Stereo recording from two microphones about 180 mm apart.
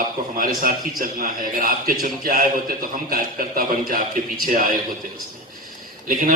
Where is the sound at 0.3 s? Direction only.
50° right (ahead or behind).